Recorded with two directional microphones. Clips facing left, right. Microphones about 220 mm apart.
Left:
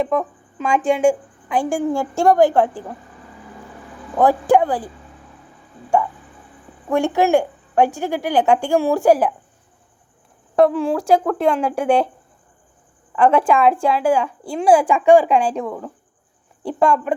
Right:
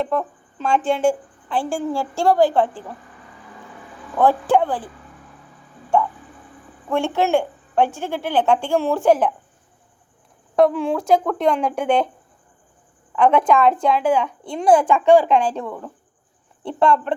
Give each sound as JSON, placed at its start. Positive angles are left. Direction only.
{"t": 0.9, "sound": "a woman's voice", "side_deg": 15}
{"t": 4.1, "sound": "a woman's voice", "side_deg": 15}
{"t": 6.8, "sound": "a woman's voice", "side_deg": 15}
{"t": 10.5, "sound": "a woman's voice", "side_deg": 0}
{"t": 13.1, "sound": "a woman's voice", "side_deg": 5}